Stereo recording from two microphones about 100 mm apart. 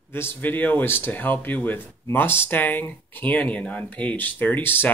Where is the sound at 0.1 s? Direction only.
20° left (ahead or behind).